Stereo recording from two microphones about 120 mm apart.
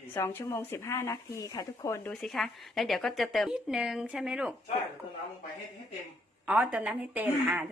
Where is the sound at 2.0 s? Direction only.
5° left (ahead or behind).